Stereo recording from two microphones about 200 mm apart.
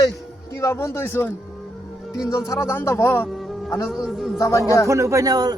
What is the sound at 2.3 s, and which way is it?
Speech, 15° left (ahead or behind).